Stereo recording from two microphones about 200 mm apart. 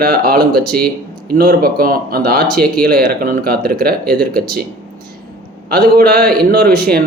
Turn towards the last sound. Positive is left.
turn(degrees=-50)  # may be behind; listen again after turning